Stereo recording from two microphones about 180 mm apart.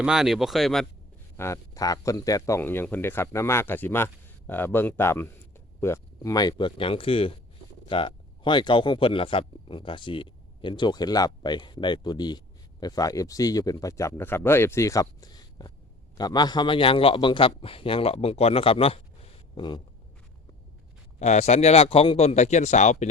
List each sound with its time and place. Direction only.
0.0 s speech: 5° right (ahead or behind)
1.4 s a man's voice: 15° left (ahead or behind)
21.2 s a man's voice: 40° left (ahead or behind)